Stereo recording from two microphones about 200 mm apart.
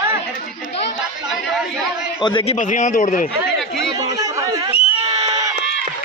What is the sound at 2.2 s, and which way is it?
Speech, 25° left (ahead or behind).